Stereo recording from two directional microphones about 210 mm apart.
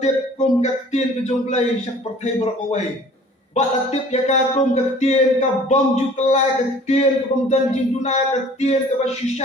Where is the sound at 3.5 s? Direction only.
30° left (ahead or behind).